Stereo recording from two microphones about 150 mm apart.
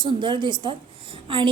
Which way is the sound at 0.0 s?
30° right (ahead or behind).